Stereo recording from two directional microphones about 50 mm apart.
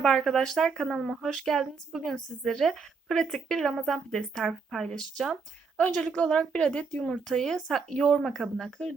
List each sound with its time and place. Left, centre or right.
0.0 s speech: centre
5.7 s a woman's voice: left
7.0 s speech: centre